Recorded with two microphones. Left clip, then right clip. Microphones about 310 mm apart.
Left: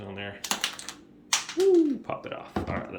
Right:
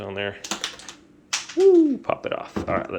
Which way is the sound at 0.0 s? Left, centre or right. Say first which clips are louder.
Right 9 dB; centre.